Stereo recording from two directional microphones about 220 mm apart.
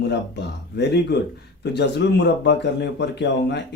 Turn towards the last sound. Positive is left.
turn(degrees=50)  # may be behind; listen again after turning